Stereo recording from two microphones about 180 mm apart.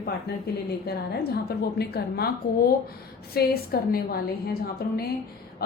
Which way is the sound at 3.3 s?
55° left (ahead or behind).